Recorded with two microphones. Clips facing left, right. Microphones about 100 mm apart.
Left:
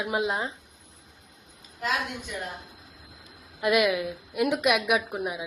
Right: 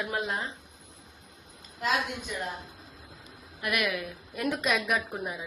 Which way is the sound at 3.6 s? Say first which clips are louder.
Left 7 dB; 20° left (ahead or behind).